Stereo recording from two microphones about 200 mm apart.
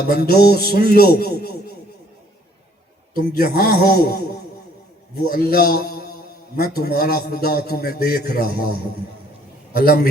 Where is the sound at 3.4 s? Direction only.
50° left (ahead or behind).